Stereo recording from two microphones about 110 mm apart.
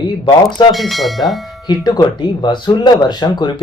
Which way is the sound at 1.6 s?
40° left (ahead or behind).